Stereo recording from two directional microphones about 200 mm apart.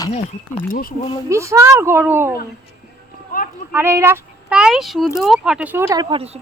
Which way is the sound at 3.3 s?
45° left (ahead or behind).